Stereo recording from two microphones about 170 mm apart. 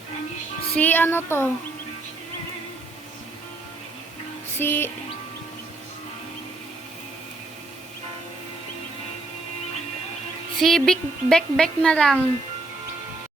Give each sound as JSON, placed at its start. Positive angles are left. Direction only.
{"t": 0.8, "sound": "music", "side_deg": 10}
{"t": 4.5, "sound": "music", "side_deg": 10}
{"t": 10.6, "sound": "speech", "side_deg": 0}